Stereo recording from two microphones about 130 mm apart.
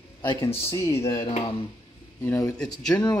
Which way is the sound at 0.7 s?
25° left (ahead or behind).